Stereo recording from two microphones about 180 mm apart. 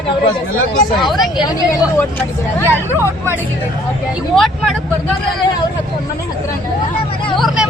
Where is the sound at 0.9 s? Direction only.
Centre (ahead or behind).